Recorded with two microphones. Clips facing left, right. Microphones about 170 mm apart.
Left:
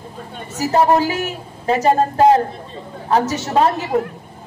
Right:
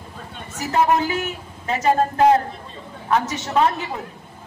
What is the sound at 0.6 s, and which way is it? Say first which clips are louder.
A man's voice: left 4 dB; 35° left (ahead or behind).